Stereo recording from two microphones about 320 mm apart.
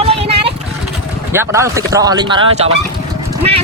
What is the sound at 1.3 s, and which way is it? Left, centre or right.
Speech, centre.